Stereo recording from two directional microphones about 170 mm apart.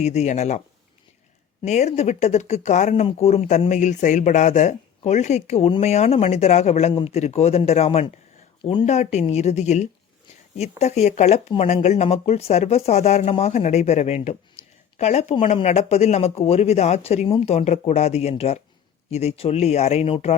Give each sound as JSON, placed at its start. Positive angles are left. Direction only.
{"t": 0.0, "sound": "speech", "side_deg": 40}
{"t": 1.6, "sound": "speech", "side_deg": 40}
{"t": 14.6, "sound": "a sound", "side_deg": 35}
{"t": 14.9, "sound": "speech", "side_deg": 40}